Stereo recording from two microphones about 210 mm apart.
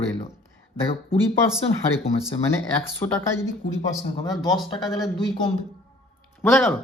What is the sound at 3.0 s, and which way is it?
Speech, 10° left (ahead or behind).